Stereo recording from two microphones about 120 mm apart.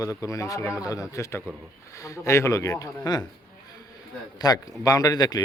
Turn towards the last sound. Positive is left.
turn(degrees=30)  # may be behind; listen again after turning